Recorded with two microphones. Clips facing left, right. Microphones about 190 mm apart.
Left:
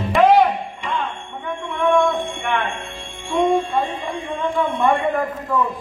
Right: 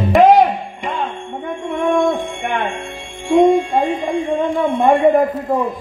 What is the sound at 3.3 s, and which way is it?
Clock, 45° right (ahead or behind).